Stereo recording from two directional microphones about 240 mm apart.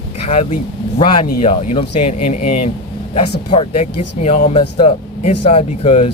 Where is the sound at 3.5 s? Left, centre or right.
Left.